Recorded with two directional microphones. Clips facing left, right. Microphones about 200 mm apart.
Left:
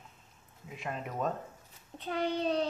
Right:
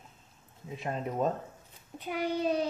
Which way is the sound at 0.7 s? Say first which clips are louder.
Right 4 dB; 30° right (ahead or behind).